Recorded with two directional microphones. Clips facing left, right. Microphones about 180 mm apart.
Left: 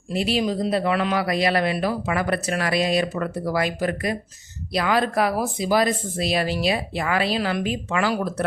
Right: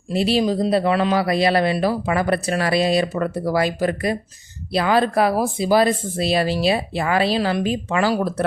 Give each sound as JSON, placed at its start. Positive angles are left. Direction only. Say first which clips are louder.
{"t": 0.1, "sound": "a man's voice", "louder": "right 4 dB", "side_deg": -30}